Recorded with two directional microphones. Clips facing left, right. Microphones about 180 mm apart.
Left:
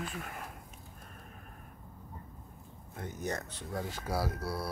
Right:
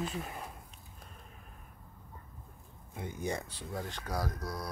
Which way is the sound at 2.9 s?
10° right (ahead or behind).